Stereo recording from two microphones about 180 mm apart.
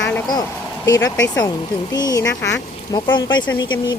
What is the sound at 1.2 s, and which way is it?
Speech, 20° left (ahead or behind).